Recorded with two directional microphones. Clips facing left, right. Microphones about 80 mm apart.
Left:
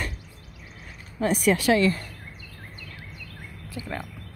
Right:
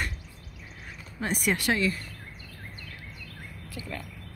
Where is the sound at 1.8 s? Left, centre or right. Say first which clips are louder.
Left 6 dB; left.